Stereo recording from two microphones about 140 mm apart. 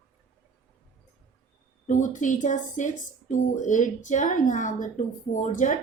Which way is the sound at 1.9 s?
65° left (ahead or behind).